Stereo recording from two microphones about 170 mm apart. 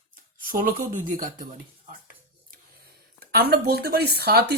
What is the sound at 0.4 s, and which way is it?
Speech, 55° right (ahead or behind).